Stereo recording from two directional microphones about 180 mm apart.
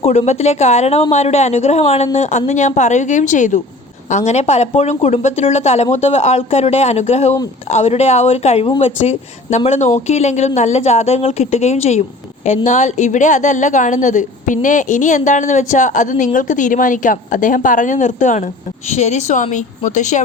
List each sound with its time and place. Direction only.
0.0 s a woman's voice: 40° left (ahead or behind)